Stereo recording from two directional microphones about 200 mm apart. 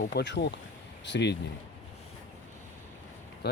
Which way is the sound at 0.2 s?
60° left (ahead or behind).